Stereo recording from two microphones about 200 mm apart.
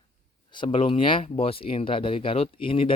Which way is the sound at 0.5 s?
25° left (ahead or behind).